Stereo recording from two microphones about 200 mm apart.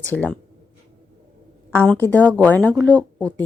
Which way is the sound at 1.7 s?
10° left (ahead or behind).